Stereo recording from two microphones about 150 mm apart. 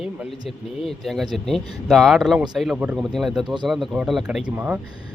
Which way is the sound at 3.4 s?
30° right (ahead or behind).